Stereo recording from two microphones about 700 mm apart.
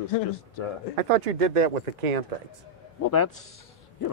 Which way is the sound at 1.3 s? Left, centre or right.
Right.